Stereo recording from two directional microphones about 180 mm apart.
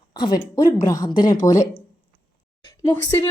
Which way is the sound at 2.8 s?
20° left (ahead or behind).